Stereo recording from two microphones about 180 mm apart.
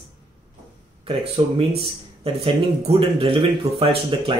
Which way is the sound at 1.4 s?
30° right (ahead or behind).